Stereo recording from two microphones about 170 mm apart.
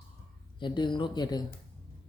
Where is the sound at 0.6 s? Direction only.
25° left (ahead or behind).